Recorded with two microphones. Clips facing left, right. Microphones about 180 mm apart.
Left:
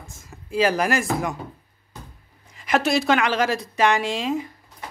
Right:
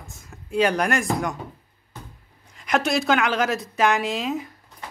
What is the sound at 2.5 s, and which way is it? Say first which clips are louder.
Speech: left 1 dB; centre (ahead or behind).